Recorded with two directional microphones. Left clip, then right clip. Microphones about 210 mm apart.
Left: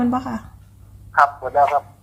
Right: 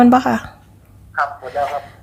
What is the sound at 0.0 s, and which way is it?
Speech, 55° right (ahead or behind).